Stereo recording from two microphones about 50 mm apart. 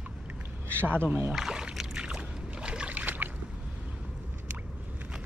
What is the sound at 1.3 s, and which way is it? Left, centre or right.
Speech, centre.